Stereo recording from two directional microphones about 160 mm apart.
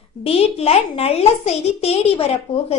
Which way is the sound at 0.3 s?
40° left (ahead or behind).